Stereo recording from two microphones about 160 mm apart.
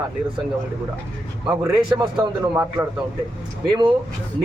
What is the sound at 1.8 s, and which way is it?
Speech, 30° right (ahead or behind).